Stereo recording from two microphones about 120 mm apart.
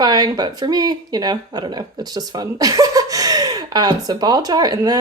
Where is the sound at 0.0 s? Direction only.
35° right (ahead or behind).